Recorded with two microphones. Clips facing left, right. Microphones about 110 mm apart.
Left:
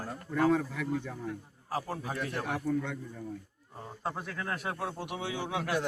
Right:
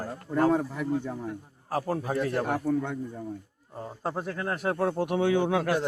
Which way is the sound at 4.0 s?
35° right (ahead or behind).